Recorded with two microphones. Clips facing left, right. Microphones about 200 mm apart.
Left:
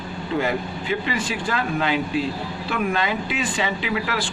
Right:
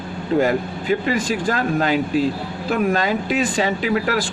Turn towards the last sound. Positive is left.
turn(degrees=-45)  # may be behind; listen again after turning